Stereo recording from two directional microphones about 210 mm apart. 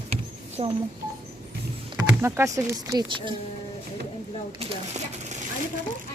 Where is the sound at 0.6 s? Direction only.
25° right (ahead or behind).